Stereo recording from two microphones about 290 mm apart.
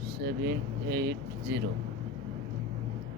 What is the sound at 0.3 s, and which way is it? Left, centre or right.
Speech, right.